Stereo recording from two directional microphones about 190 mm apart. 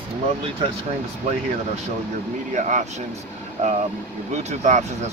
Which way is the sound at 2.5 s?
40° right (ahead or behind).